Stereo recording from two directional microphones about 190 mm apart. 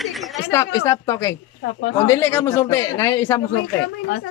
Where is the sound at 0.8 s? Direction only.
15° left (ahead or behind).